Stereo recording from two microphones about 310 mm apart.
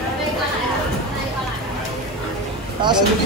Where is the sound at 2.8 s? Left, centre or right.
Centre.